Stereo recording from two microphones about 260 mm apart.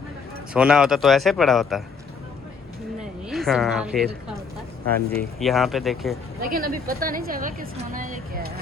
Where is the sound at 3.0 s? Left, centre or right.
Centre.